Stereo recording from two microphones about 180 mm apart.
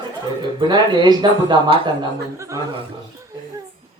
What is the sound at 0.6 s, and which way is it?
Speech, 25° right (ahead or behind).